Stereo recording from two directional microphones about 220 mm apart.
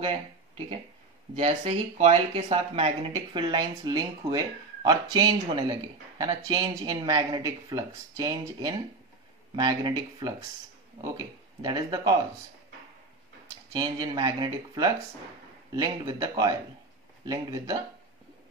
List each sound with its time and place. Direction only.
1.3 s speech: 25° right (ahead or behind)
11.6 s speech: 20° right (ahead or behind)
13.7 s speech: 20° right (ahead or behind)